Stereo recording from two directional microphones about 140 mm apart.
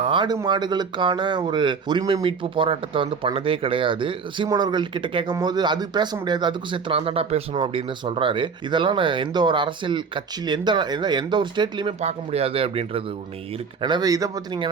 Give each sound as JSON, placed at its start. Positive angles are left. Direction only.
{"t": 0.0, "sound": "speech", "side_deg": -35}
{"t": 11.9, "sound": "speech", "side_deg": -50}
{"t": 13.8, "sound": "speech", "side_deg": -30}